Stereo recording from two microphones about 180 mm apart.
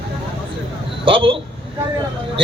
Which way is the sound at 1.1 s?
30° right (ahead or behind).